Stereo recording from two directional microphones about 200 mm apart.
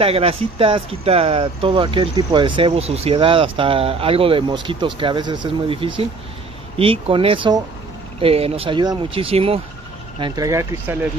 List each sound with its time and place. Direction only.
0.0 s speech: 30° right (ahead or behind)